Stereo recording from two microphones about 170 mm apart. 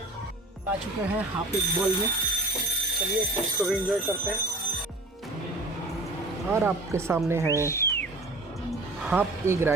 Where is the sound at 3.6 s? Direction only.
5° right (ahead or behind).